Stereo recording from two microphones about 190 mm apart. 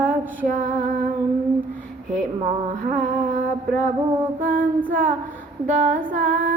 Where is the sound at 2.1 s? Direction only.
40° right (ahead or behind).